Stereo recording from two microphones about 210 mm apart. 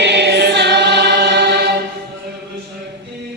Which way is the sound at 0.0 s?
55° right (ahead or behind).